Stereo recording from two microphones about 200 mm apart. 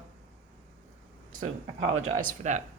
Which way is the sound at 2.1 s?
40° right (ahead or behind).